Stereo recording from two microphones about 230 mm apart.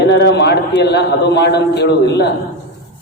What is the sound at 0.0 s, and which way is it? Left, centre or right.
A man's voice, left.